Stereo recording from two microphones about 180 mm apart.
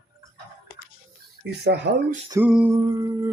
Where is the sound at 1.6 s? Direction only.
70° right (ahead or behind).